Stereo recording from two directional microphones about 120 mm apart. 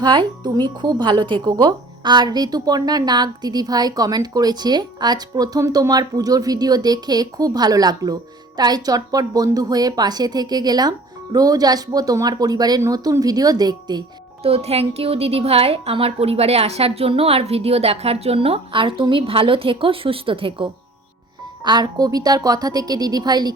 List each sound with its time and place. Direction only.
0.0 s speech: 40° right (ahead or behind)
14.4 s a woman's voice: 55° right (ahead or behind)
21.6 s speech: 35° right (ahead or behind)